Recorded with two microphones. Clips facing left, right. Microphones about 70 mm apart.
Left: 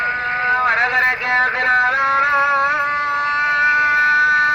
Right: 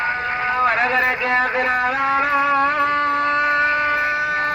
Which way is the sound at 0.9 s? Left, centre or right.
Left.